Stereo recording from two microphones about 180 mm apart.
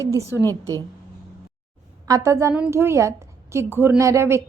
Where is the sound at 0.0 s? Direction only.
15° right (ahead or behind).